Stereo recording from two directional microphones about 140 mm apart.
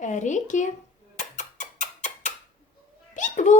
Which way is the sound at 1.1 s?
60° left (ahead or behind).